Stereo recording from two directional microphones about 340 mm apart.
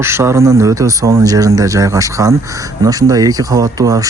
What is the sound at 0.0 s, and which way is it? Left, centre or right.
Speech, centre.